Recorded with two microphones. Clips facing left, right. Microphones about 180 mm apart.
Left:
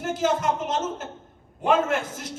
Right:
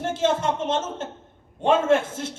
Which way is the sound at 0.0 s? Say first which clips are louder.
Right 1 dB; 30° right (ahead or behind).